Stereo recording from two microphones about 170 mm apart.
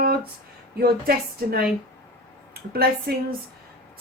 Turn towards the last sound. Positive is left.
turn(degrees=-60)  # may be behind; listen again after turning